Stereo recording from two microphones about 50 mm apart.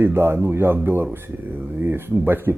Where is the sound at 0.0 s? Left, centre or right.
Right.